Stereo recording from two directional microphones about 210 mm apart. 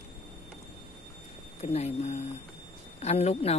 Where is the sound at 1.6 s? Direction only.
30° left (ahead or behind).